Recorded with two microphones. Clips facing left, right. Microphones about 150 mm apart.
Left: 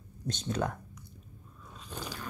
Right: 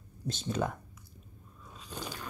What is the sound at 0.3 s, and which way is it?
Speech, centre (ahead or behind).